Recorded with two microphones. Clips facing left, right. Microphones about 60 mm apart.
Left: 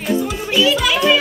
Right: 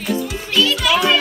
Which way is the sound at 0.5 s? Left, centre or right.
Centre.